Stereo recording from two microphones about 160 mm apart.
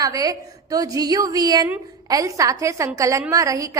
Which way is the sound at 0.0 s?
20° right (ahead or behind).